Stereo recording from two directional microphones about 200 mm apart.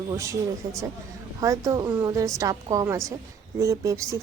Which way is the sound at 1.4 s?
15° right (ahead or behind).